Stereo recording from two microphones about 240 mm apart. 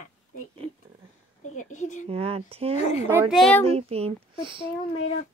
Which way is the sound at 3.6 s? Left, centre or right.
Right.